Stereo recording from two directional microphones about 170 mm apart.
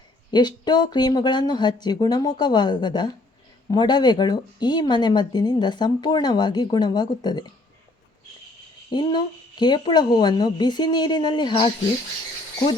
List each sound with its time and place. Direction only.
0.3 s speech: 25° left (ahead or behind)
8.9 s speech: 25° left (ahead or behind)